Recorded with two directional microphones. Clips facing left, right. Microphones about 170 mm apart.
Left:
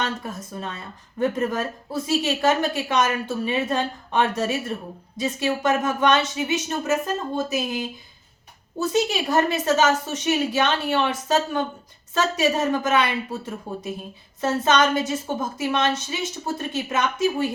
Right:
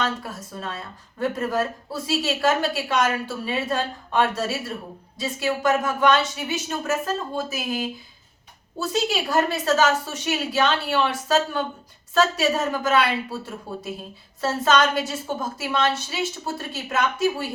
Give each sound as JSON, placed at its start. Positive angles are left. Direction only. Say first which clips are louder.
{"t": 0.2, "sound": "a woman's voice", "louder": "left 2 dB", "side_deg": 20}
{"t": 8.8, "sound": "a woman's voice", "louder": "left 2 dB", "side_deg": 20}